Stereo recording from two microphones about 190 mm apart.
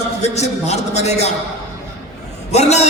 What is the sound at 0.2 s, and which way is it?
A man's voice, 35° left (ahead or behind).